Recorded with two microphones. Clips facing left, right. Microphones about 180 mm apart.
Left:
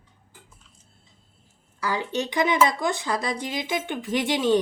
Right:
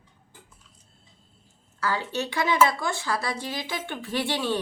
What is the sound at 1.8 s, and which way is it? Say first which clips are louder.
Speech: left 1 dB; 15° left (ahead or behind).